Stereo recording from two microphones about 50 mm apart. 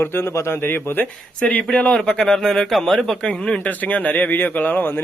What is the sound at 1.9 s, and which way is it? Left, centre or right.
A man's voice, centre.